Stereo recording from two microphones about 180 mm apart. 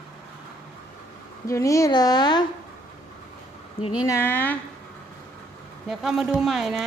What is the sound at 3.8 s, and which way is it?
Speech, 20° left (ahead or behind).